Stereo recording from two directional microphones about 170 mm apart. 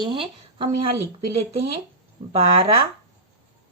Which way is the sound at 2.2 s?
35° right (ahead or behind).